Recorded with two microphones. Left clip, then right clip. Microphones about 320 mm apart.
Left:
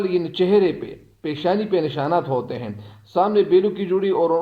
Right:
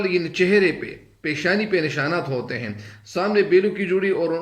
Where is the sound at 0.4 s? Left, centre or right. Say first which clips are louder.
Left 1 dB; left.